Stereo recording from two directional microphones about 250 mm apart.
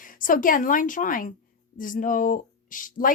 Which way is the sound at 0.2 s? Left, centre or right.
Left.